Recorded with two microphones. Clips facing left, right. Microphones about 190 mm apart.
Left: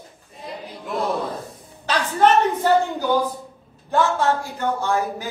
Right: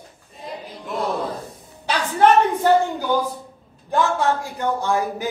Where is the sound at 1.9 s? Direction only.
10° right (ahead or behind).